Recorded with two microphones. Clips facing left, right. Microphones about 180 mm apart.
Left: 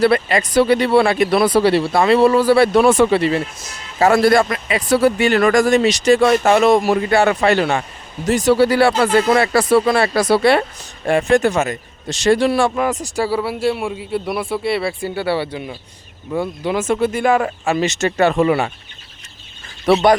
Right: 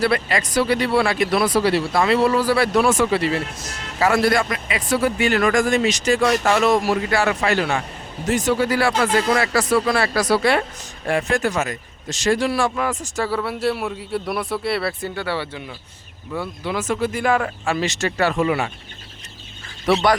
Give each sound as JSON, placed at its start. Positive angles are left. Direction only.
{"t": 0.0, "sound": "speech", "side_deg": 25}
{"t": 4.0, "sound": "speech", "side_deg": 35}
{"t": 6.1, "sound": "speech", "side_deg": 25}
{"t": 13.3, "sound": "a man's voice", "side_deg": 5}
{"t": 19.9, "sound": "speech", "side_deg": 20}